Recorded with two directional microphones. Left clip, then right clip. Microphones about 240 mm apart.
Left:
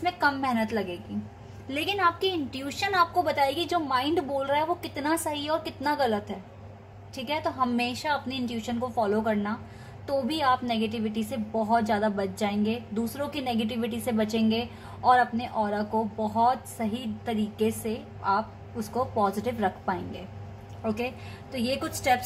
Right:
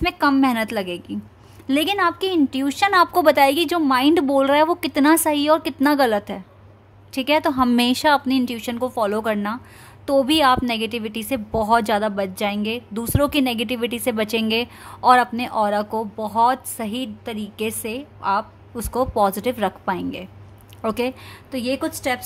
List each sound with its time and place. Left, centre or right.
0.0 s a woman's voice: right
18.8 s speech: right
19.6 s a woman's voice: right